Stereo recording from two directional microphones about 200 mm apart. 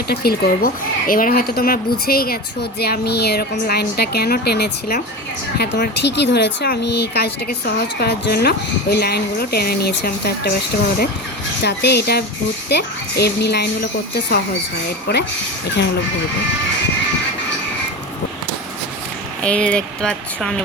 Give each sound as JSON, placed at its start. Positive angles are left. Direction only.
{"t": 0.1, "sound": "speech", "side_deg": 50}
{"t": 11.6, "sound": "speech", "side_deg": 55}
{"t": 15.1, "sound": "speech", "side_deg": 55}
{"t": 19.4, "sound": "speech", "side_deg": 5}